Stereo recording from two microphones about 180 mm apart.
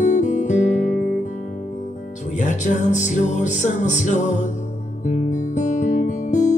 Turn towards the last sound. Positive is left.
turn(degrees=40)  # may be behind; listen again after turning